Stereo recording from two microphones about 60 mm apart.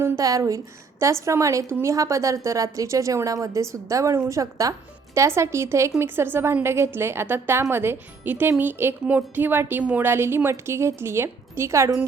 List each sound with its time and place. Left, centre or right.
0.2 s a woman's voice: right
5.1 s a woman's voice: right
6.0 s a woman's voice: right